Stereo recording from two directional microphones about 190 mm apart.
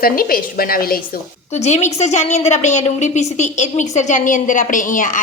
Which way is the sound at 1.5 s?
35° left (ahead or behind).